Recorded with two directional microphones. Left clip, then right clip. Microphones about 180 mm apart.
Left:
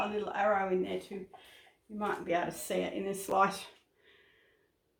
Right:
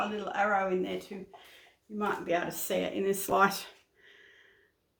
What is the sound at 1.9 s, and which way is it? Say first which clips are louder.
Speech: right 2 dB; 35° right (ahead or behind).